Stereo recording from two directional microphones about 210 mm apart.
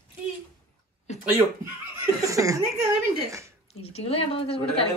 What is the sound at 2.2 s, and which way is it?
Speech, 15° right (ahead or behind).